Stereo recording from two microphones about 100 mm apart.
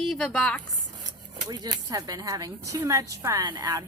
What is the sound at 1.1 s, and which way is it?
A woman's voice, 45° right (ahead or behind).